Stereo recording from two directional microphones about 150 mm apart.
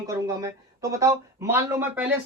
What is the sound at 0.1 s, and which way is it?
Speech, 20° right (ahead or behind).